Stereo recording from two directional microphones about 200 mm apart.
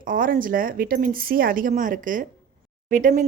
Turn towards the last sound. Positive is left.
turn(degrees=-40)  # may be behind; listen again after turning